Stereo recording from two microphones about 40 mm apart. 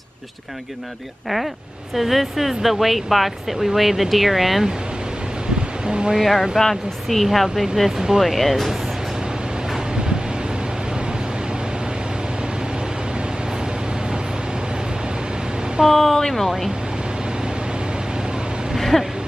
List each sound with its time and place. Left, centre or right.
2.0 s speech: centre
5.9 s speech: right
6.2 s speech: centre
7.2 s speech: centre
15.9 s a sound: centre
18.8 s a sound: centre